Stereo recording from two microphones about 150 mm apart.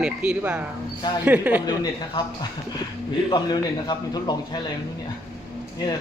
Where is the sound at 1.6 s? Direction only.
30° left (ahead or behind).